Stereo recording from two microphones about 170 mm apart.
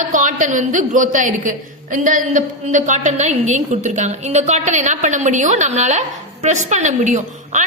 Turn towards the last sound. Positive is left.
turn(degrees=-45)  # may be behind; listen again after turning